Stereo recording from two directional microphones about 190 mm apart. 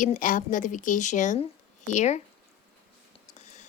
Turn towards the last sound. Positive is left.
turn(degrees=35)  # may be behind; listen again after turning